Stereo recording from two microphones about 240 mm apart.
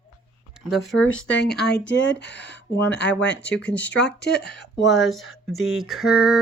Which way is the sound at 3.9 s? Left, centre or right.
Left.